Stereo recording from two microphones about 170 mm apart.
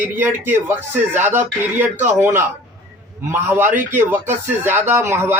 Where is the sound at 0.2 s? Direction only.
10° right (ahead or behind).